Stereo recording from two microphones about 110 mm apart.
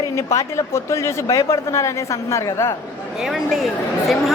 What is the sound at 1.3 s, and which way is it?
Speech, 30° left (ahead or behind).